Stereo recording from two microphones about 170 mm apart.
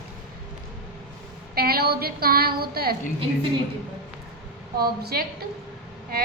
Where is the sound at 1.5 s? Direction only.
65° right (ahead or behind).